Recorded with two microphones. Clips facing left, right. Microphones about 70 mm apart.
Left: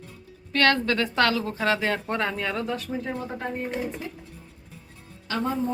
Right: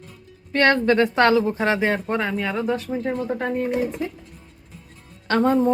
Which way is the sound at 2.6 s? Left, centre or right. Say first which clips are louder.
Right 6 dB; right.